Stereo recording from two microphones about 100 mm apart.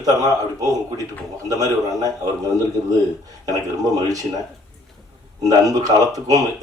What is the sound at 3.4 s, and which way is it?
Speech, 40° right (ahead or behind).